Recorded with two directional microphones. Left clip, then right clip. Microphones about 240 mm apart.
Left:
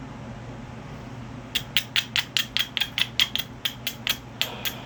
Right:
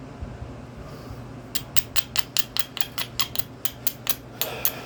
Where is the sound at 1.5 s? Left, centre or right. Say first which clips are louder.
Left 6 dB; centre.